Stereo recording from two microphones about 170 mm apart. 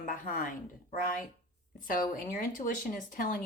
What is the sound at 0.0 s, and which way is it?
A woman's voice, 50° left (ahead or behind).